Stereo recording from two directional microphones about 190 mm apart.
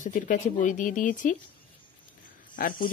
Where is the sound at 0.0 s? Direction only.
45° left (ahead or behind).